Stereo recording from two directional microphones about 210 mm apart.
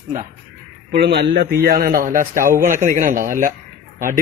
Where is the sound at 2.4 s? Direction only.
15° right (ahead or behind).